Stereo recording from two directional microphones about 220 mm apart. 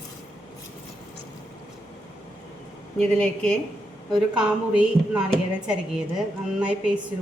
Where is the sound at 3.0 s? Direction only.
5° left (ahead or behind).